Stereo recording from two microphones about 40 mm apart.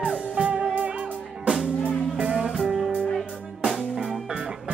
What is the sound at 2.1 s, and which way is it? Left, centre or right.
Music, right.